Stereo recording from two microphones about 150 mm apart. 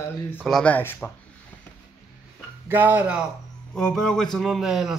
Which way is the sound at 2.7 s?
10° right (ahead or behind).